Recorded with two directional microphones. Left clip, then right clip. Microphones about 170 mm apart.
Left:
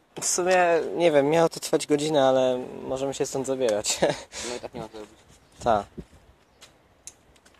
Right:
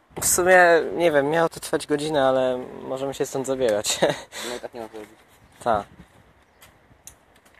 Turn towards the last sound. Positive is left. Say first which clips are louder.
# even
turn(degrees=15)  # may be behind; listen again after turning